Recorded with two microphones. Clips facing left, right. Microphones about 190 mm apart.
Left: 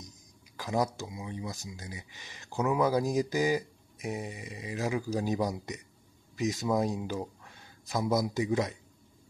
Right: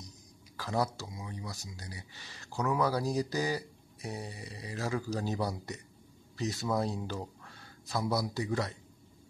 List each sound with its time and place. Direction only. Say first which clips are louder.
0.6 s speech: left 2 dB; 15° left (ahead or behind)